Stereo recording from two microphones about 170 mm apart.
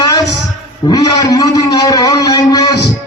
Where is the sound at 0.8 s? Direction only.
20° left (ahead or behind).